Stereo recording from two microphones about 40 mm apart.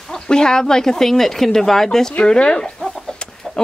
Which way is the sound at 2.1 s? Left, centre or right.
Left.